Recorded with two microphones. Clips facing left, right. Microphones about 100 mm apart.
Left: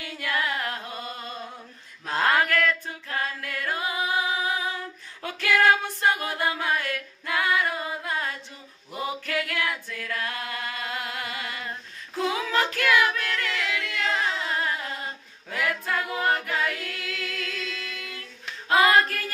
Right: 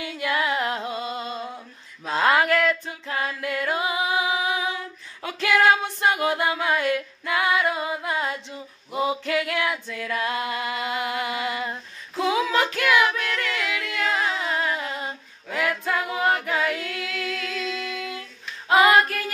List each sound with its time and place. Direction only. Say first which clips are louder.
0.0 s music: right 4 dB; 20° right (ahead or behind)
5.2 s a sound: right 2 dB; 20° right (ahead or behind)
8.9 s female singing: right 5 dB; 20° right (ahead or behind)
12.7 s singing: right 2 dB; 20° right (ahead or behind)
14.8 s a capella: right 3 dB; 25° right (ahead or behind)
18.7 s female singing: right 3 dB; 20° right (ahead or behind)